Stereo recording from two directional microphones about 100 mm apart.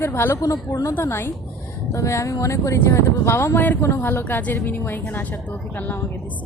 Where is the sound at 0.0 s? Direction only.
25° left (ahead or behind).